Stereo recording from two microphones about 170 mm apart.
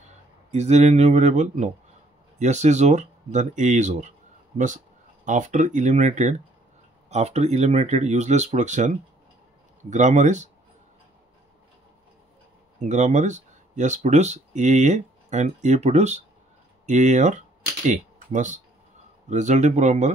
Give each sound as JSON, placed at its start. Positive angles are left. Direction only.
{"t": 0.5, "sound": "speech", "side_deg": -40}
{"t": 5.2, "sound": "speech", "side_deg": -45}
{"t": 12.8, "sound": "speech", "side_deg": -45}